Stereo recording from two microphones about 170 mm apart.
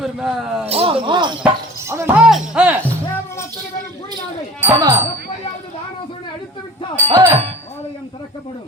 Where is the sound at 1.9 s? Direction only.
15° right (ahead or behind).